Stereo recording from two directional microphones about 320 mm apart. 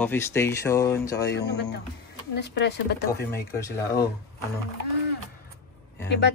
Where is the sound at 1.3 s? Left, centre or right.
Left.